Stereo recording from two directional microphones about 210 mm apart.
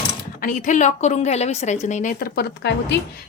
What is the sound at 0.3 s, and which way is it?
Speech, 40° left (ahead or behind).